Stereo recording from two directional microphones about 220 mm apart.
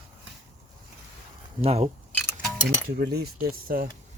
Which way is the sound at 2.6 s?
45° right (ahead or behind).